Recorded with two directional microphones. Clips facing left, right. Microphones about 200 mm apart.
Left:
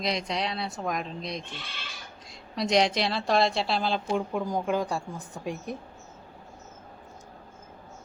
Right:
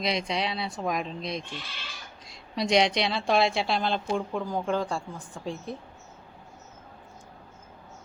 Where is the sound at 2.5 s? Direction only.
Centre (ahead or behind).